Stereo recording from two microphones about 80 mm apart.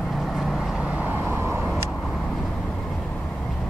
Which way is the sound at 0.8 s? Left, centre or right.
Right.